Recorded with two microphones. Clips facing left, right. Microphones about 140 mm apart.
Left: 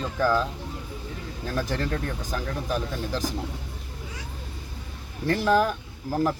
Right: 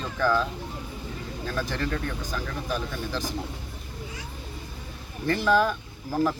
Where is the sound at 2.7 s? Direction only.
40° left (ahead or behind).